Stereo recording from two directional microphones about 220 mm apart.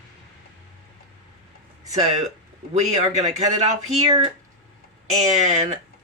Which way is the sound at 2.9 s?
30° right (ahead or behind).